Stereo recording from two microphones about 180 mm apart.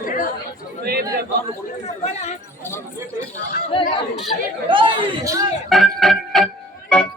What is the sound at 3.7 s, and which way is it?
Speech, 30° left (ahead or behind).